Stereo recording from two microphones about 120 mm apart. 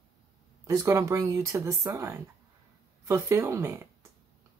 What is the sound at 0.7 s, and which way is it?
Speech, 25° right (ahead or behind).